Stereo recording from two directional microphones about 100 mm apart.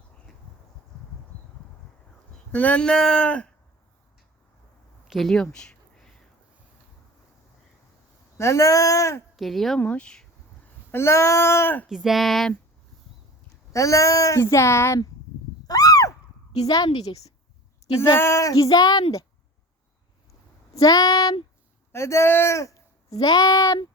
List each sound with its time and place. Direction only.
2.5 s speech: 15° left (ahead or behind)
5.0 s a sound: centre (ahead or behind)
8.4 s speech: 30° left (ahead or behind)
9.3 s a woman's voice: centre (ahead or behind)
9.8 s speech: 15° left (ahead or behind)
10.9 s speech: 25° left (ahead or behind)
11.9 s speech: 5° right (ahead or behind)
13.7 s speech: 35° left (ahead or behind)
15.6 s a sound: 40° left (ahead or behind)
16.6 s speech: 40° left (ahead or behind)
17.0 s a woman's voice: 90° left
18.0 s speech: 25° left (ahead or behind); by 19.0 s 40° left (ahead or behind)
20.7 s speech: 35° left (ahead or behind)
21.9 s speech: 30° left (ahead or behind)